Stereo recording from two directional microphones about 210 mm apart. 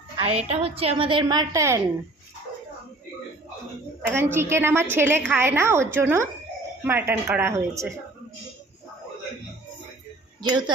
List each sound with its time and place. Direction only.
0.2 s a woman's voice: 30° right (ahead or behind)
4.1 s speech: 10° right (ahead or behind)